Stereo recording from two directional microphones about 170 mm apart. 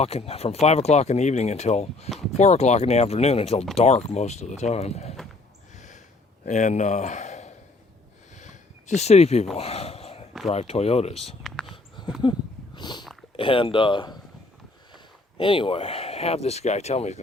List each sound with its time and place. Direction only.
0.0 s speech: 35° left (ahead or behind)
5.7 s gasp: 45° left (ahead or behind)
6.4 s speech: 45° left (ahead or behind)
8.4 s a sound: 45° left (ahead or behind)
10.5 s speech: 40° left (ahead or behind)
11.4 s a sound: centre (ahead or behind)
11.7 s dog: 25° left (ahead or behind)
12.7 s a sound: 25° left (ahead or behind)
13.3 s speech: 30° left (ahead or behind)
15.4 s speech: 30° left (ahead or behind)